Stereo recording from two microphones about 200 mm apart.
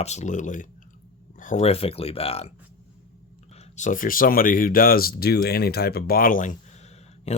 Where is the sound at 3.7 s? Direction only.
40° left (ahead or behind).